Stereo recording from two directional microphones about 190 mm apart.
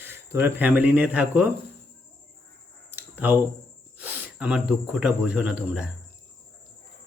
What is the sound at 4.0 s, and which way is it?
Speech, 5° right (ahead or behind).